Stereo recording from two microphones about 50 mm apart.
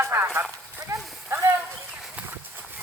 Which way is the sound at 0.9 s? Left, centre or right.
Right.